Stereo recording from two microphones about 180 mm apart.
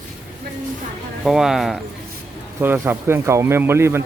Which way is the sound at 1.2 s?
Centre (ahead or behind).